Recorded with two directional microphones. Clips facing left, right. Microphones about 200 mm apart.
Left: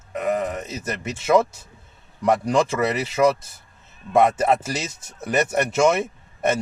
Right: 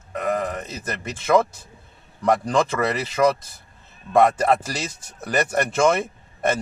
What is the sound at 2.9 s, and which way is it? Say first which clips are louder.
Speech: left 1 dB; 25° left (ahead or behind).